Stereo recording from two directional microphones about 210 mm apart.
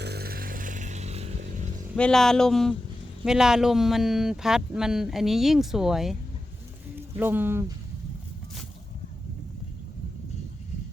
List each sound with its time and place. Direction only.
0.0 s a sound: 50° right (ahead or behind); by 1.4 s 30° right (ahead or behind)
2.0 s speech: 5° left (ahead or behind)
7.2 s speech: 10° right (ahead or behind)